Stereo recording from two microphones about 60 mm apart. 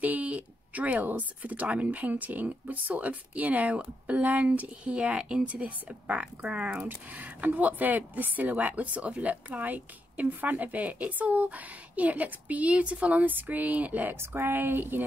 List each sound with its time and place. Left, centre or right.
0.0 s speech: right
6.9 s speech: right
14.1 s speech: right